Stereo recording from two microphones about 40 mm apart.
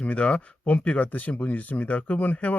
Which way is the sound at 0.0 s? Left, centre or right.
Left.